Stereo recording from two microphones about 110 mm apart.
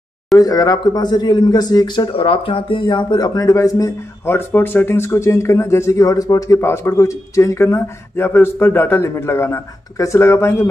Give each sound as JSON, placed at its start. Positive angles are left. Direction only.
{"t": 0.4, "sound": "speech", "side_deg": 35}
{"t": 2.1, "sound": "speech", "side_deg": 55}